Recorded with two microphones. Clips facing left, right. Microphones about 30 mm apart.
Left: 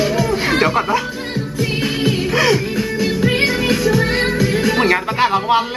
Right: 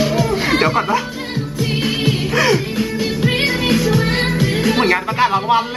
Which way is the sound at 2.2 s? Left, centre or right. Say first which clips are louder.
Even; centre.